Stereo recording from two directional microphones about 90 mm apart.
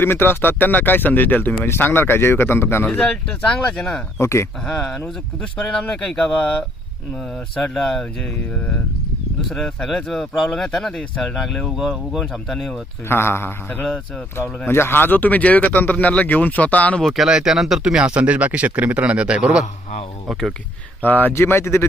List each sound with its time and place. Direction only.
0.0 s speech: 25° left (ahead or behind)
2.8 s speech: 15° left (ahead or behind)
4.2 s speech: 30° left (ahead or behind)
4.6 s speech: 10° left (ahead or behind)
9.5 s speech: 5° left (ahead or behind)
13.1 s speech: 25° left (ahead or behind)
17.0 s speech: centre (ahead or behind)
21.0 s speech: 20° left (ahead or behind)